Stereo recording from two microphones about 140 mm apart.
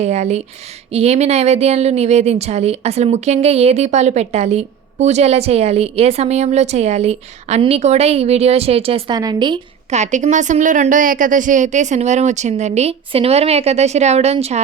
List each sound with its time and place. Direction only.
0.0 s a woman's voice: 55° right (ahead or behind)
9.1 s speech: 30° right (ahead or behind)
9.9 s a woman's voice: 55° right (ahead or behind)